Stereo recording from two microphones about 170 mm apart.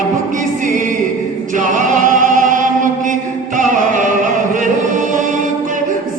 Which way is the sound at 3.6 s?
50° right (ahead or behind).